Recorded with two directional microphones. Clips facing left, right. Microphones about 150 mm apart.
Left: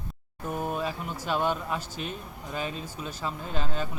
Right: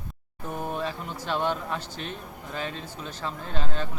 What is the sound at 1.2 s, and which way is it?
Speech, 10° left (ahead or behind).